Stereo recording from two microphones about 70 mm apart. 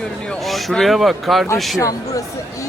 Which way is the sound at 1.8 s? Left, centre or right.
Left.